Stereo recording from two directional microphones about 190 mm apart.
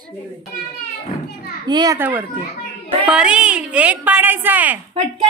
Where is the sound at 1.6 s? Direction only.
20° right (ahead or behind).